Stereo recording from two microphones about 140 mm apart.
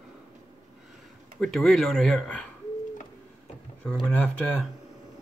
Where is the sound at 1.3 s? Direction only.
Centre (ahead or behind).